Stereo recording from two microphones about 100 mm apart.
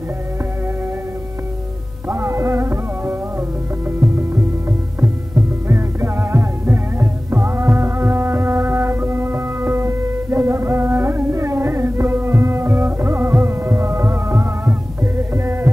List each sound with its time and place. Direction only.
2.0 s music: 25° right (ahead or behind)
5.7 s music: 25° right (ahead or behind)
15.3 s heart sounds: 25° right (ahead or behind)